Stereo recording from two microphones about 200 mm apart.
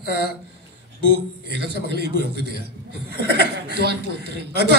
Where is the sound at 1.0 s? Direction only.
55° right (ahead or behind).